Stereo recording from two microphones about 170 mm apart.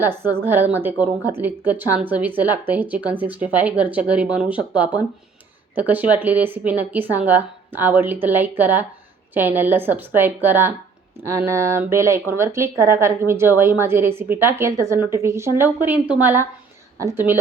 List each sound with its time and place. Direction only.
0.0 s speech: 10° right (ahead or behind)